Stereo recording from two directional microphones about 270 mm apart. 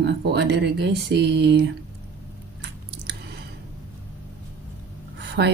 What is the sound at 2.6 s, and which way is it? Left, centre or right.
Squish, right.